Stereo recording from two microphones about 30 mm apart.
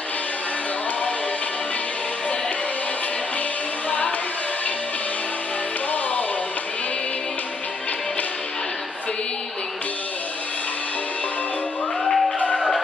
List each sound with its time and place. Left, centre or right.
12.0 s music: centre